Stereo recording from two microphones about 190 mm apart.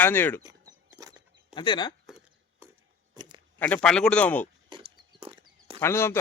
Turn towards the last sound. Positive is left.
turn(degrees=15)  # may be behind; listen again after turning